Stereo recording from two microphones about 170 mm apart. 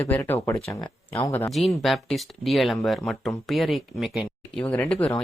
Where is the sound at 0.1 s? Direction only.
15° left (ahead or behind).